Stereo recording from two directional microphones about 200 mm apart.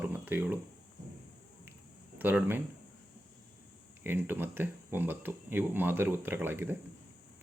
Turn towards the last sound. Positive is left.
turn(degrees=-10)  # may be behind; listen again after turning